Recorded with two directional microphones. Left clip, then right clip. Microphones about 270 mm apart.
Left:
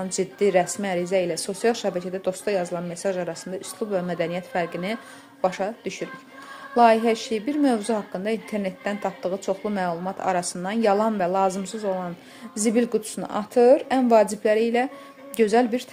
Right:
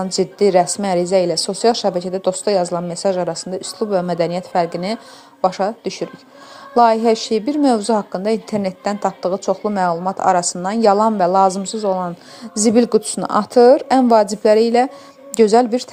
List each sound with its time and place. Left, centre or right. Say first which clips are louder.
0.0 s a woman's voice: right 7 dB; centre